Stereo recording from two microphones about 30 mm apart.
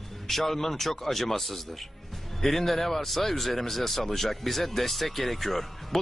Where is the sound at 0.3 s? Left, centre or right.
Centre.